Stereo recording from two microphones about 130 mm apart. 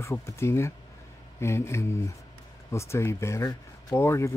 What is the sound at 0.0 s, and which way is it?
Speech, 20° left (ahead or behind).